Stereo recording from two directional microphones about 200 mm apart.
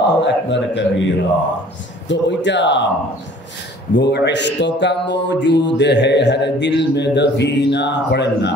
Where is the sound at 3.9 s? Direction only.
60° left (ahead or behind).